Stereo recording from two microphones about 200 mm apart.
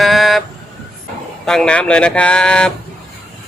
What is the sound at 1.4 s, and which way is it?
Speech, 5° left (ahead or behind).